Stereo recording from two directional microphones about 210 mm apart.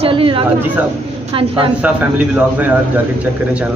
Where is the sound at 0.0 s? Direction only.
25° right (ahead or behind).